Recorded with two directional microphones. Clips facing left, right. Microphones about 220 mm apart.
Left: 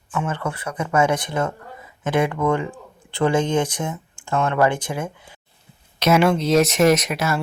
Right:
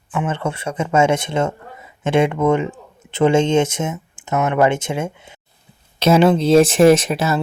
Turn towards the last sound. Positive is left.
turn(degrees=-30)  # may be behind; listen again after turning